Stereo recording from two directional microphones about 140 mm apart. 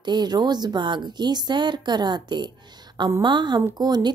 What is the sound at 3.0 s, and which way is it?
Speech, 20° right (ahead or behind).